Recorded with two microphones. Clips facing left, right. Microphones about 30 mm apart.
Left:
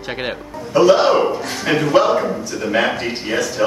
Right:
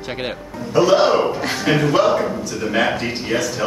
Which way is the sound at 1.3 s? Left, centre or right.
Centre.